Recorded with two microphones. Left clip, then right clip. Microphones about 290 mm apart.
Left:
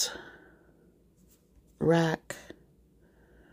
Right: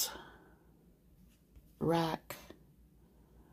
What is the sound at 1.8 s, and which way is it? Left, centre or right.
Speech, left.